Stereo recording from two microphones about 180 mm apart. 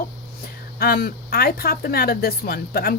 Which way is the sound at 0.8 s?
60° left (ahead or behind).